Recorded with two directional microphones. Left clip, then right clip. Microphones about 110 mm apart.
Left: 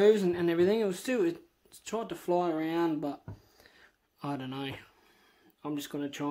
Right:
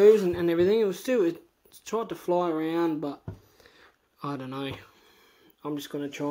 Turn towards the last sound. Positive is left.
turn(degrees=10)  # may be behind; listen again after turning